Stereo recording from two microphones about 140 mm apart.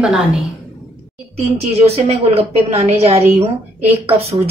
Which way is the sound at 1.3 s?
45° right (ahead or behind).